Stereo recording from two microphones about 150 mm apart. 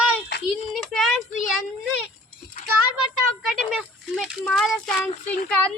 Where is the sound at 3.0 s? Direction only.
5° right (ahead or behind).